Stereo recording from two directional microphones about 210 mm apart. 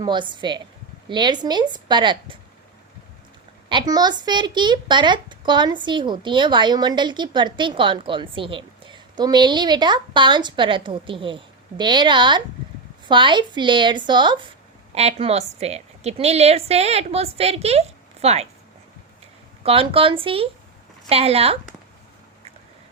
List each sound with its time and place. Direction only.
0.0 s a child's voice: 20° right (ahead or behind)
3.7 s a child's voice: 20° right (ahead or behind)
19.6 s a child's voice: 25° right (ahead or behind)